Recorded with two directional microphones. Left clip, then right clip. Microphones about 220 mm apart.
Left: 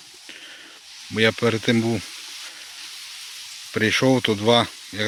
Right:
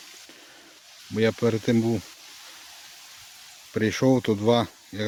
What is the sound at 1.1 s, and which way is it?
Speech, centre (ahead or behind).